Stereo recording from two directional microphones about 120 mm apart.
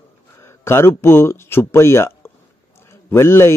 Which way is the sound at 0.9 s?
20° left (ahead or behind).